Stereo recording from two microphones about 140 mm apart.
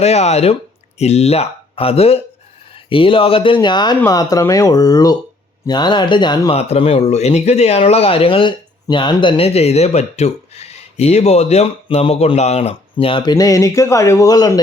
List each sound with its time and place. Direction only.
0.0 s speech: 50° left (ahead or behind); by 6.5 s 30° left (ahead or behind)
6.5 s speech: 45° left (ahead or behind)
13.3 s speech: 25° left (ahead or behind)